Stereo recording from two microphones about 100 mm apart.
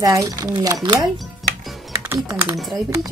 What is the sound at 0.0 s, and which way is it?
Speech, 35° right (ahead or behind).